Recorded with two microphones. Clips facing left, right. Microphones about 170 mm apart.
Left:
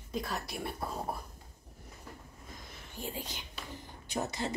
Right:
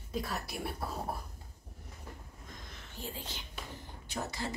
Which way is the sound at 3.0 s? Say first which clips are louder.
Left 3 dB; 15° left (ahead or behind).